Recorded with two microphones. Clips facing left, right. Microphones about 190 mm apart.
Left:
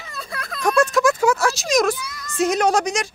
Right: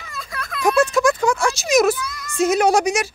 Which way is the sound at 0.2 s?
35° left (ahead or behind).